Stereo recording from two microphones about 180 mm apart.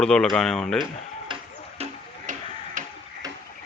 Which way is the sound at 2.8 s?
45° right (ahead or behind).